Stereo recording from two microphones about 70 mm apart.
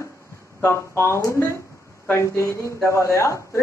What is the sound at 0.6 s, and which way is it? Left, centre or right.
A man's voice, left.